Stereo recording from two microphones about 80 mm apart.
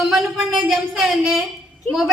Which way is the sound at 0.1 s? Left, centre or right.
Centre.